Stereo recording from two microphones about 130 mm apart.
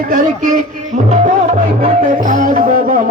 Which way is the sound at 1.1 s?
65° right (ahead or behind).